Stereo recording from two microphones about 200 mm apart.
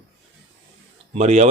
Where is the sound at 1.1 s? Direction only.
35° right (ahead or behind).